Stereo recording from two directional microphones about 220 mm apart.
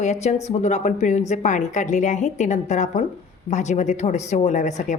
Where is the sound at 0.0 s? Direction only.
30° left (ahead or behind).